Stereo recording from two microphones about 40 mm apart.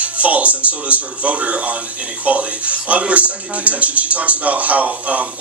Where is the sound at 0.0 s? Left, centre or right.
Right.